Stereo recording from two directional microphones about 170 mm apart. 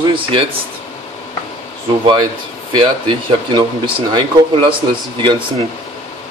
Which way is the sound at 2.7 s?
30° right (ahead or behind).